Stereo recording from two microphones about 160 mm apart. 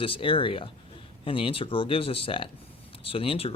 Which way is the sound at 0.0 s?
35° left (ahead or behind).